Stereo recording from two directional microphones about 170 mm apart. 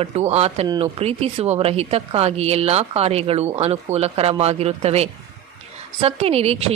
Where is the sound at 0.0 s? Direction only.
40° right (ahead or behind).